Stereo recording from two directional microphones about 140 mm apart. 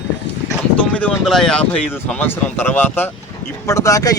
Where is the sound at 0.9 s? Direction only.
5° left (ahead or behind).